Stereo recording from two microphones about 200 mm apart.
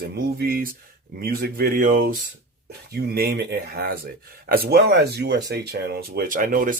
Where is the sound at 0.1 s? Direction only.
55° right (ahead or behind).